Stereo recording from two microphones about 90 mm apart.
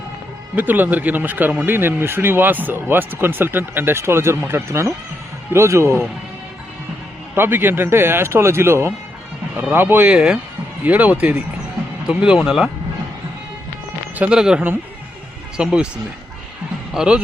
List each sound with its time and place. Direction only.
0.5 s speech: 20° right (ahead or behind)
7.3 s speech: 25° right (ahead or behind); by 12.7 s 5° right (ahead or behind)
14.2 s speech: 10° right (ahead or behind)
16.9 s a man's voice: 10° right (ahead or behind)